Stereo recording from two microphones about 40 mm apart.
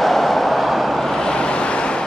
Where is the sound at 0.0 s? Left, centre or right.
Centre.